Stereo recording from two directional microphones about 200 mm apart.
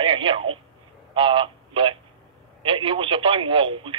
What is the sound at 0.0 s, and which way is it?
Telephone, 25° right (ahead or behind).